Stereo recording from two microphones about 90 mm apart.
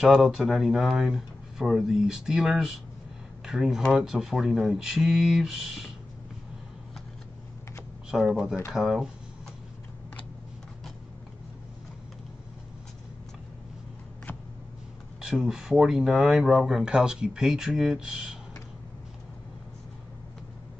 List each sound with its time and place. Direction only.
0.0 s speech: 5° right (ahead or behind)
8.1 s speech: 5° right (ahead or behind)
15.1 s speech: 5° right (ahead or behind)